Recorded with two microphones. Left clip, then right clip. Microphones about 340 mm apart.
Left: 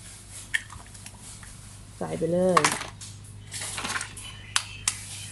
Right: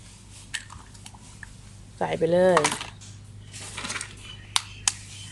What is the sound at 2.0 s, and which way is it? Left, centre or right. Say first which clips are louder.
Speech: right 5 dB; right.